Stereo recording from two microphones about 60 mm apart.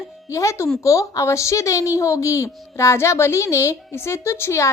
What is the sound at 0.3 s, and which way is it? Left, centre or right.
A child's voice, left.